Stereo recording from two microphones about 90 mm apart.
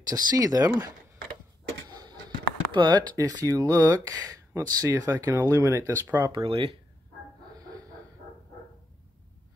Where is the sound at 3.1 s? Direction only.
40° right (ahead or behind).